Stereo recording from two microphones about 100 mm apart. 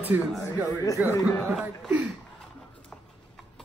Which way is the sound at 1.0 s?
15° right (ahead or behind).